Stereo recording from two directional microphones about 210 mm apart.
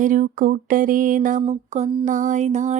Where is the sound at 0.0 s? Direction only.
40° right (ahead or behind).